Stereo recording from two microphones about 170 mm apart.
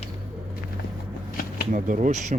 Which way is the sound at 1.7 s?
50° right (ahead or behind).